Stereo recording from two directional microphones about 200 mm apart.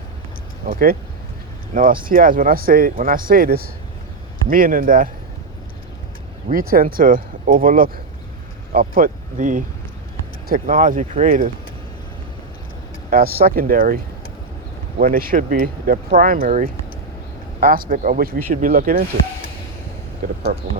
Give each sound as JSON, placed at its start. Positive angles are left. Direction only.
{"t": 0.7, "sound": "speech", "side_deg": -45}
{"t": 2.0, "sound": "speech", "side_deg": -45}
{"t": 6.5, "sound": "speech", "side_deg": -45}
{"t": 13.1, "sound": "speech", "side_deg": -50}
{"t": 20.2, "sound": "speech", "side_deg": -40}